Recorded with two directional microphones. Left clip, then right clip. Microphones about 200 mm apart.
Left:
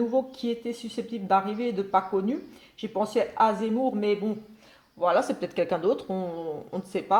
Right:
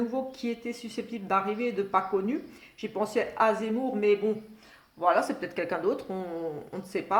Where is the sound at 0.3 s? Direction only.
40° left (ahead or behind).